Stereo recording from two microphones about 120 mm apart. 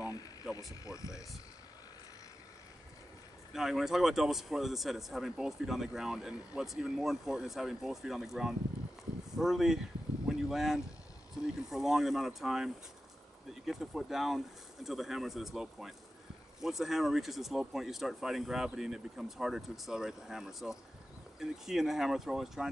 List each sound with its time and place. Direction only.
0.0 s vehicle: 30° left (ahead or behind)
0.8 s speech: 25° left (ahead or behind)
3.5 s a man's voice: 5° right (ahead or behind)
10.2 s a sound: centre (ahead or behind)
11.7 s a man's voice: 5° right (ahead or behind)